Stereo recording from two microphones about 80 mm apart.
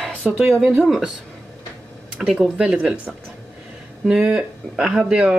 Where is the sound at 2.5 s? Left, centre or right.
Centre.